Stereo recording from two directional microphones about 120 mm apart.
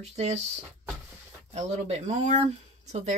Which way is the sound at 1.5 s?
65° right (ahead or behind).